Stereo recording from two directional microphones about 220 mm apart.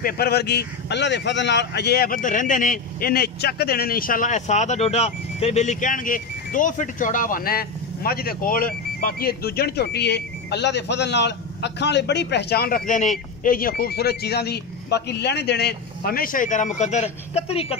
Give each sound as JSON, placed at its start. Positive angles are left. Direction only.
{"t": 0.0, "sound": "speech", "side_deg": 45}